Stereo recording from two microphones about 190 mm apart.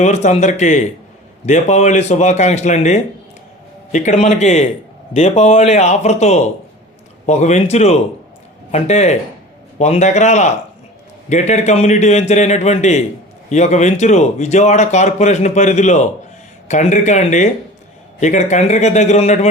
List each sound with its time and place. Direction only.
0.0 s speech: 40° left (ahead or behind)